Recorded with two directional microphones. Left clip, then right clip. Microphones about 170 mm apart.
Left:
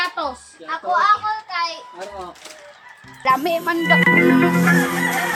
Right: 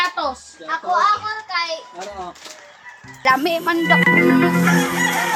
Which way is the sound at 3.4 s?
35° right (ahead or behind).